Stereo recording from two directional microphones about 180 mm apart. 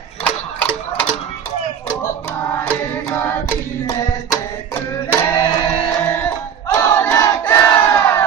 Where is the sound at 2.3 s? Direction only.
10° left (ahead or behind).